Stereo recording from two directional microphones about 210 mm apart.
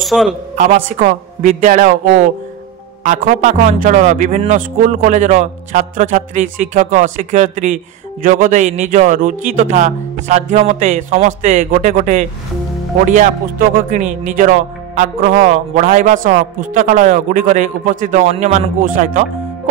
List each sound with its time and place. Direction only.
0.0 s a man's voice: centre (ahead or behind)
0.6 s speech: 40° right (ahead or behind)